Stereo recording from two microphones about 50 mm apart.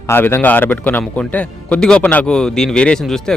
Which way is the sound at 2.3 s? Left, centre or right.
Centre.